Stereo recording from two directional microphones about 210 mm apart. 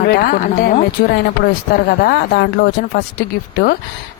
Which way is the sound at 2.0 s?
50° left (ahead or behind).